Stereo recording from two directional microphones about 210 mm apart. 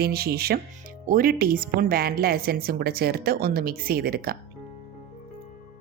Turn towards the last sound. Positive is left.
turn(degrees=-45)  # may be behind; listen again after turning